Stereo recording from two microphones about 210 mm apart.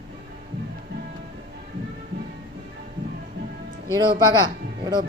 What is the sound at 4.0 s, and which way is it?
Speech, 20° right (ahead or behind).